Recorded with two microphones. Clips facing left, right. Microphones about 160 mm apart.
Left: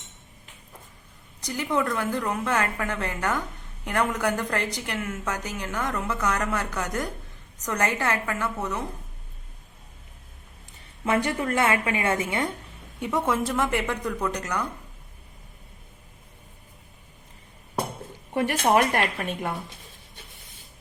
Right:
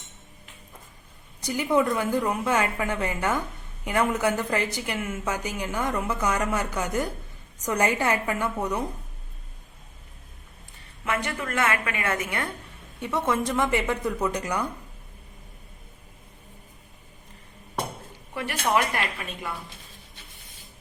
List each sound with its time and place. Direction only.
1.4 s a woman's voice: 10° right (ahead or behind)
11.0 s a woman's voice: 30° left (ahead or behind)
13.0 s speech: 10° left (ahead or behind); by 14.7 s 10° right (ahead or behind)
18.3 s a woman's voice: 40° left (ahead or behind)